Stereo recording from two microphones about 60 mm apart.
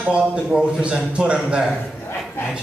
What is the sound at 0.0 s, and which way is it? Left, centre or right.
A man's voice, centre.